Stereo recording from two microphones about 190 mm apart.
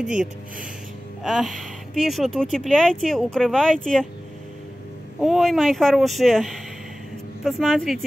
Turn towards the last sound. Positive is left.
turn(degrees=0)  # may be behind; listen again after turning